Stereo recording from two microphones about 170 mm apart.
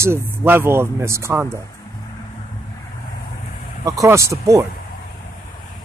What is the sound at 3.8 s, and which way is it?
Speech, 20° right (ahead or behind).